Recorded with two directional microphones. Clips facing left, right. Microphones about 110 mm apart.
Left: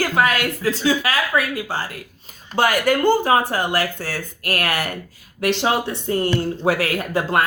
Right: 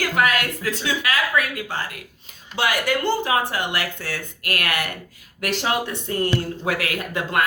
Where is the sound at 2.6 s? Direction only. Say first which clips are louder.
Left 5 dB; 45° left (ahead or behind).